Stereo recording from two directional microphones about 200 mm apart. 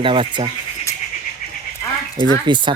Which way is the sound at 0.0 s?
25° right (ahead or behind).